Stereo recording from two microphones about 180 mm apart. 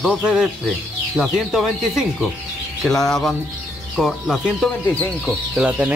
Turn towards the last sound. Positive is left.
turn(degrees=-5)  # may be behind; listen again after turning